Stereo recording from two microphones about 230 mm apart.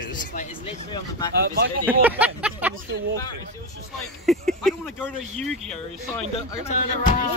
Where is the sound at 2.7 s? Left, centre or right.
Right.